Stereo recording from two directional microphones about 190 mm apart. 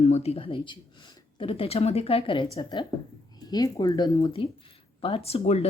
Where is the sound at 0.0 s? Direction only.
35° left (ahead or behind).